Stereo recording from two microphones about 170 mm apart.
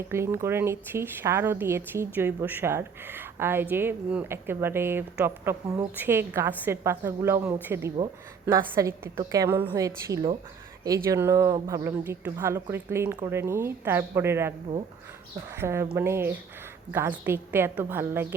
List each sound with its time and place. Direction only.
0.1 s a woman's voice: 15° right (ahead or behind)
15.5 s speech: 15° right (ahead or behind)